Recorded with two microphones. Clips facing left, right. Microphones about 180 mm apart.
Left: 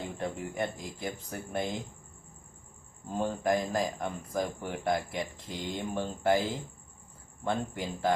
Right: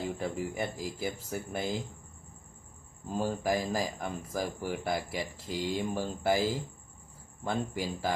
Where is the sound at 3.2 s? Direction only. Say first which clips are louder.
Left 1 dB; 5° right (ahead or behind).